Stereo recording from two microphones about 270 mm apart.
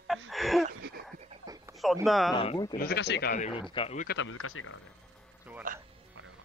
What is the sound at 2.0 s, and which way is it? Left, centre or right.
Speech, centre.